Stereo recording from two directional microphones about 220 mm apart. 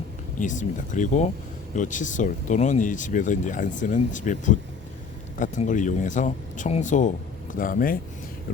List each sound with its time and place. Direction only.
0.3 s speech: 35° left (ahead or behind)